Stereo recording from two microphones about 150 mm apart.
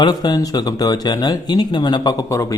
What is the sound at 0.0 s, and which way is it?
Speech, 30° left (ahead or behind).